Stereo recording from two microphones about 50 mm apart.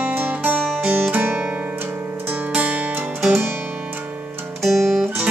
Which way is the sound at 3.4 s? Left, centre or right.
Right.